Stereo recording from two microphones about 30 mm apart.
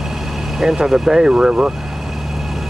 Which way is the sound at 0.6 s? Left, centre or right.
Centre.